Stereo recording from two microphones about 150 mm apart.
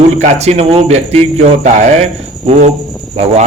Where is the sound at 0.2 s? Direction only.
45° right (ahead or behind).